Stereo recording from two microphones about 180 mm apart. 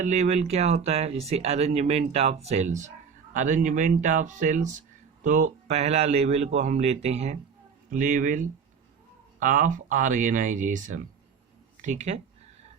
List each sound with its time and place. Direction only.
0.0 s speech: 40° right (ahead or behind)